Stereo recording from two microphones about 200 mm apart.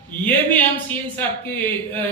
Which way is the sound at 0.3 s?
10° left (ahead or behind).